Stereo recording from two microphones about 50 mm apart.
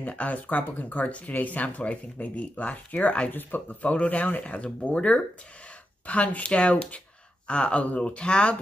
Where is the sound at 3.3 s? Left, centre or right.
Left.